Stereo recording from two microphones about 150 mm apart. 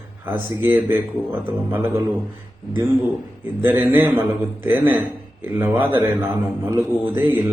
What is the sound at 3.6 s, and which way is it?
Speech, 15° right (ahead or behind).